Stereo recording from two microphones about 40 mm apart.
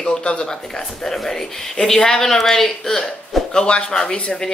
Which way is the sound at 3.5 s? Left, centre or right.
Left.